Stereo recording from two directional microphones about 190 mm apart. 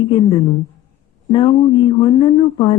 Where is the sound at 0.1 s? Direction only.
25° left (ahead or behind).